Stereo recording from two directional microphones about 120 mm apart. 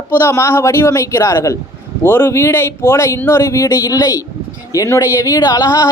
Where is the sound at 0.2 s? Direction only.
20° left (ahead or behind).